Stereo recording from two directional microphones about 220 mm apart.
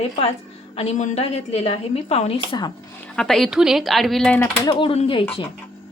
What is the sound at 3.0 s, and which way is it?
A woman's voice, centre (ahead or behind).